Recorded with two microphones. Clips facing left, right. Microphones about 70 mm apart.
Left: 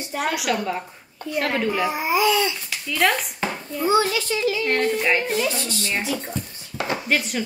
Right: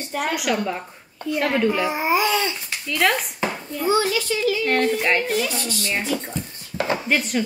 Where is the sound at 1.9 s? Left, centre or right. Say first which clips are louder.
Even; right.